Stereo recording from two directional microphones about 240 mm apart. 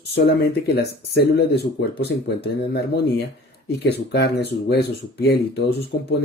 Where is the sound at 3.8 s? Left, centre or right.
Left.